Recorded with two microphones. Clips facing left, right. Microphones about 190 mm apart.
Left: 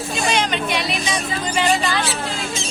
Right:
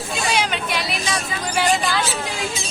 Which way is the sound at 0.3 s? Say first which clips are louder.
Left 2 dB; 10° right (ahead or behind).